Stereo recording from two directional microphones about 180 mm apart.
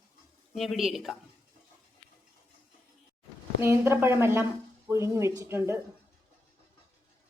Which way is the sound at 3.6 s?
15° right (ahead or behind).